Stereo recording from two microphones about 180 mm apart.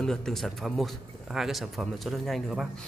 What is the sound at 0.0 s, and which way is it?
A man's voice, 5° left (ahead or behind).